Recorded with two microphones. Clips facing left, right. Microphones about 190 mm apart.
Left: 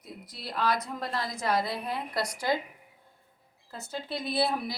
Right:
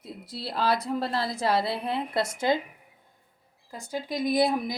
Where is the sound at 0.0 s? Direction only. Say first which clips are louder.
Right 5 dB; 30° right (ahead or behind).